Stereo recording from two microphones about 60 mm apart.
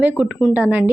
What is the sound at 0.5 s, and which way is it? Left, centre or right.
Speech, right.